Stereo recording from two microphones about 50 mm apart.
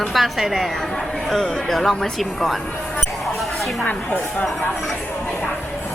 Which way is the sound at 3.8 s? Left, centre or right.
Left.